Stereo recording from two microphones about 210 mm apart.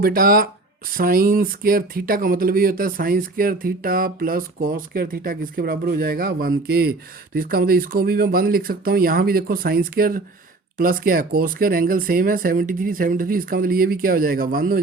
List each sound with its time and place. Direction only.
0.0 s speech: 45° right (ahead or behind)